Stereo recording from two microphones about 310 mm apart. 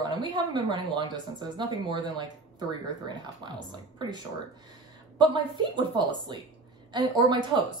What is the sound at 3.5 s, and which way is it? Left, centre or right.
Speech, centre.